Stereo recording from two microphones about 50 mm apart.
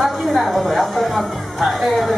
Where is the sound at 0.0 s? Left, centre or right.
Centre.